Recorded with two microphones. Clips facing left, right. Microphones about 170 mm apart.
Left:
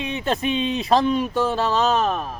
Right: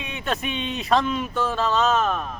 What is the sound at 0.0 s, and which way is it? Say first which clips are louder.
Speech: left 5 dB; 30° left (ahead or behind).